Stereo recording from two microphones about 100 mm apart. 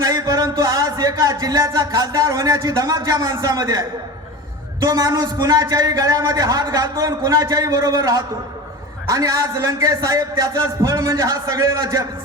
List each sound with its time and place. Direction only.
0.0 s a man's voice: 35° right (ahead or behind)